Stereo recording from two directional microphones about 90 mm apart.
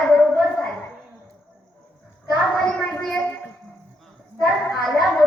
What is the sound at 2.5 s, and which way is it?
Speech, 10° left (ahead or behind).